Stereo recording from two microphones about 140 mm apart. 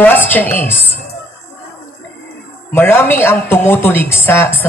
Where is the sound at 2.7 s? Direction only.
15° left (ahead or behind).